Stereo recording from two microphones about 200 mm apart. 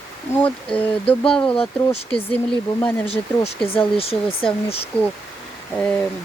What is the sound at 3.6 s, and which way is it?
Speech, 30° left (ahead or behind).